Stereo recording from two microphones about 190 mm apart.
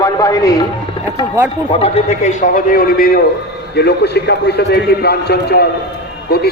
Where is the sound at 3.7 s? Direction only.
60° left (ahead or behind).